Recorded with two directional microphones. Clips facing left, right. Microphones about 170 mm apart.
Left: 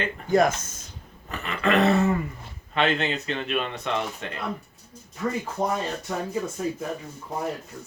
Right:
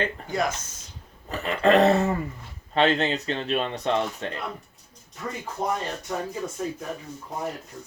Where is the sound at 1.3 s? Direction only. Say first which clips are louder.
Right 4 dB; 35° right (ahead or behind).